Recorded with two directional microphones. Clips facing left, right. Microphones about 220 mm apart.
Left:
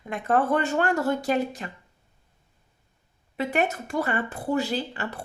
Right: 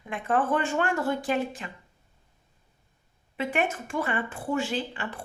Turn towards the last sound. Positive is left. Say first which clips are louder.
# left 2 dB
turn(degrees=40)  # may be behind; listen again after turning